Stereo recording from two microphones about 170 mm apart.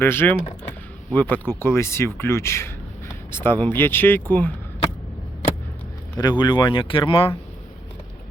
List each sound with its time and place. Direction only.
0.0 s speech: 15° left (ahead or behind)
6.1 s speech: 25° left (ahead or behind)